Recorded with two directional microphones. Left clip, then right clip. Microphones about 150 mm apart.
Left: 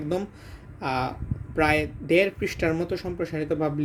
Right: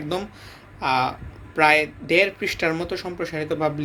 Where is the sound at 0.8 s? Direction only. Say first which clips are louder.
Right 6 dB; 60° left (ahead or behind).